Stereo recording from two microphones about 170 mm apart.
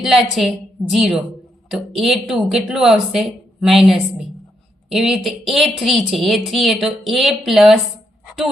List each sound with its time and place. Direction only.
0.0 s speech: centre (ahead or behind)